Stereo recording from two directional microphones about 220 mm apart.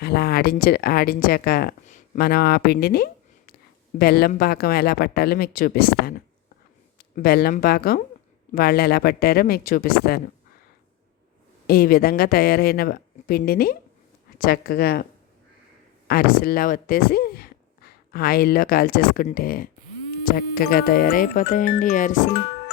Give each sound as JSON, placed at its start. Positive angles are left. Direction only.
{"t": 0.0, "sound": "a woman's voice", "side_deg": 45}
{"t": 11.6, "sound": "speech", "side_deg": 45}
{"t": 16.0, "sound": "speech", "side_deg": 40}